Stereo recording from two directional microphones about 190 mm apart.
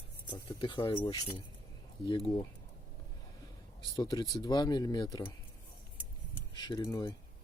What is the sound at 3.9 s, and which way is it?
Speech, 20° left (ahead or behind).